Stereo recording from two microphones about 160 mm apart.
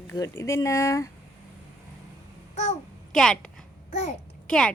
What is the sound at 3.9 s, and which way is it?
Speech, 45° left (ahead or behind).